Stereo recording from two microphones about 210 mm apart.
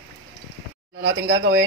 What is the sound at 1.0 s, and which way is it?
Speech, 60° right (ahead or behind).